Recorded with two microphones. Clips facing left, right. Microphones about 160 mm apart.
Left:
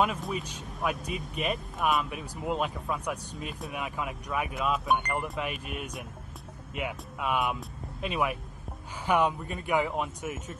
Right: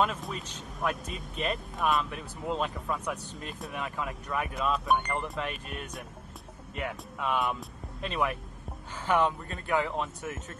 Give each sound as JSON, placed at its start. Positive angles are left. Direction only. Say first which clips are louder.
{"t": 0.0, "sound": "speech", "louder": "left 1 dB", "side_deg": 5}